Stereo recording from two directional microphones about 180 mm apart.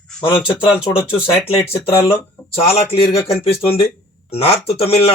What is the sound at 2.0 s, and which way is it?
Speech, 15° left (ahead or behind).